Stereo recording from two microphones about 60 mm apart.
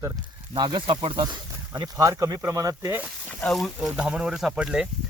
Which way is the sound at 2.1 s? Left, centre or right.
Right.